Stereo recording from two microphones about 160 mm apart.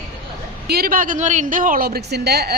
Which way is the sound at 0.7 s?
70° right (ahead or behind).